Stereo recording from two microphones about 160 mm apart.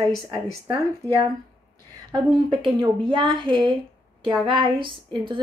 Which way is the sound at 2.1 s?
30° right (ahead or behind).